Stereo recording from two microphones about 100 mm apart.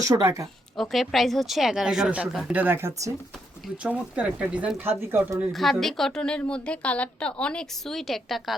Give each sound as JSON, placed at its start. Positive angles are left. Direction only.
{"t": 0.0, "sound": "speech", "side_deg": -30}
{"t": 0.8, "sound": "a woman's voice", "side_deg": 0}
{"t": 3.8, "sound": "speech", "side_deg": -15}
{"t": 5.5, "sound": "a woman's voice", "side_deg": 0}